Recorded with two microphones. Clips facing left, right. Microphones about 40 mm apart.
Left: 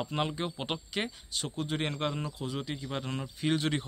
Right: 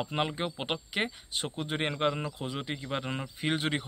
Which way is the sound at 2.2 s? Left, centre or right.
Right.